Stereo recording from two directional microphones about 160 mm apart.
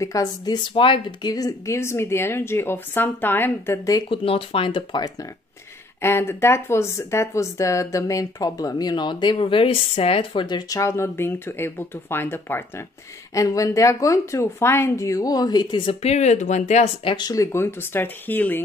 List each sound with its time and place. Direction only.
0.0 s speech: 20° left (ahead or behind)
4.1 s speech: 35° left (ahead or behind)
5.9 s speech: 15° left (ahead or behind); by 17.1 s 45° left (ahead or behind)
17.1 s speech: 25° left (ahead or behind)